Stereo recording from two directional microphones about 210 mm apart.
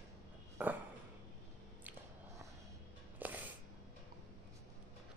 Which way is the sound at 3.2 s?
10° right (ahead or behind).